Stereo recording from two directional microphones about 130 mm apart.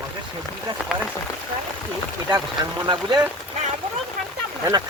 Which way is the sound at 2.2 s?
35° right (ahead or behind).